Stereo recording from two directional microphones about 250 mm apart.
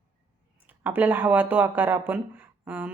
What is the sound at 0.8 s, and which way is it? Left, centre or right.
Speech, centre.